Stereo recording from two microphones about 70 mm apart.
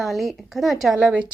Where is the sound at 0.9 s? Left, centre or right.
Centre.